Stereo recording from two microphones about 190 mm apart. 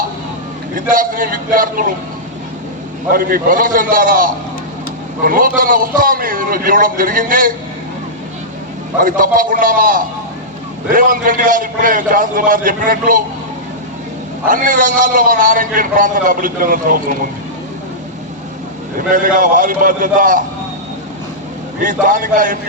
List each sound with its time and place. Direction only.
0.8 s a man's voice: 45° right (ahead or behind)
3.1 s a man's voice: 50° right (ahead or behind)
9.0 s a man's voice: 45° right (ahead or behind)
14.4 s a man's voice: 45° right (ahead or behind)
18.9 s a man's voice: 45° right (ahead or behind)
21.8 s a man's voice: 45° right (ahead or behind)